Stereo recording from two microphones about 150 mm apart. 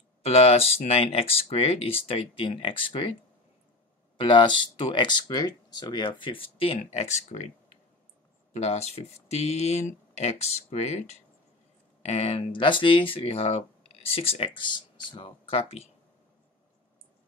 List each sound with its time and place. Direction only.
0.2 s speech: 45° left (ahead or behind)
4.2 s speech: 30° left (ahead or behind); by 7.4 s 50° left (ahead or behind)
8.5 s speech: 45° left (ahead or behind)